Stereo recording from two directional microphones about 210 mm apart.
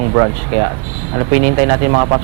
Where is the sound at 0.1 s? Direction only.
20° right (ahead or behind).